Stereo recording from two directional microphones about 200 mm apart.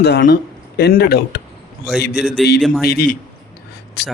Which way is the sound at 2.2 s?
Centre (ahead or behind).